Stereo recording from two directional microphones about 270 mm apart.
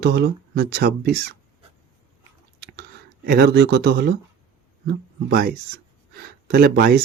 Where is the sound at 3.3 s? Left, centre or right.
Right.